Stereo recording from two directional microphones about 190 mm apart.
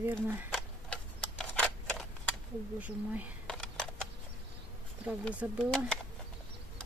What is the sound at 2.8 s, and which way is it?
Speech, 10° right (ahead or behind).